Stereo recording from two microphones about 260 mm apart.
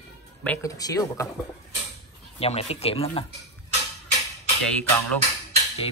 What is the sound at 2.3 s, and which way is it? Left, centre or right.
Speech, left.